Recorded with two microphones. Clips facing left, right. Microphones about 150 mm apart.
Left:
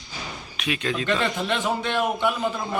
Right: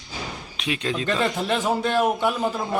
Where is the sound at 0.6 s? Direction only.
30° right (ahead or behind).